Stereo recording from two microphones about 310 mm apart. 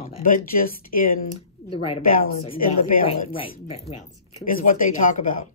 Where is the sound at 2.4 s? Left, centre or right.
Left.